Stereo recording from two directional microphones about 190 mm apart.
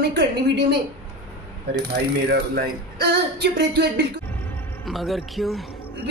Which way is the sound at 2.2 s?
55° right (ahead or behind).